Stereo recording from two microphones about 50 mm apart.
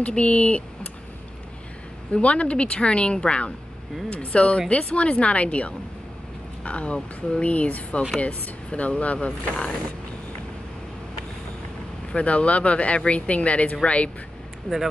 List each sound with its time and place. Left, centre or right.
0.0 s speech: left
2.2 s speech: left
12.1 s speech: left